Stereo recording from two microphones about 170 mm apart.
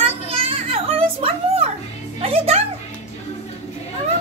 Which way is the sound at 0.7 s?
35° right (ahead or behind).